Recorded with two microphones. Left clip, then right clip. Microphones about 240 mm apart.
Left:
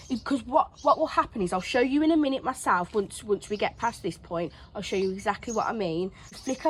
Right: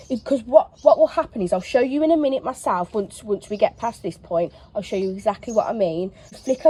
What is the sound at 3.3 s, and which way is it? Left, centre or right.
Speech, centre.